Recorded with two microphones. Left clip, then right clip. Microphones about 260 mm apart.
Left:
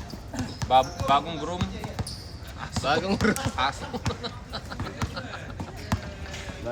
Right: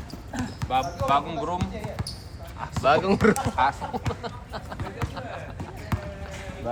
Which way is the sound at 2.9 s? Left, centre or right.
Right.